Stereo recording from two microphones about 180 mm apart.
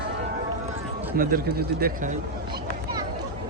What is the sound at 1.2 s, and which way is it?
Speech, 55° right (ahead or behind).